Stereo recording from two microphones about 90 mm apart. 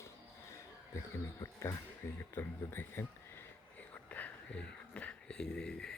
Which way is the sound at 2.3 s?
25° left (ahead or behind).